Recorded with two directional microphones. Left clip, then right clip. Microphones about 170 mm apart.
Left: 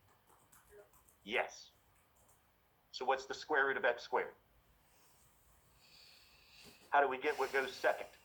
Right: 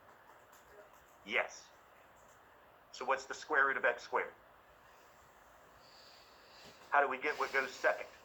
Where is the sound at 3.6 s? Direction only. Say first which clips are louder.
Right 3 dB; 30° left (ahead or behind).